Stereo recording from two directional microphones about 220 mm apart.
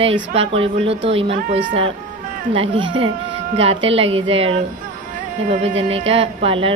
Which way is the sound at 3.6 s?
25° right (ahead or behind).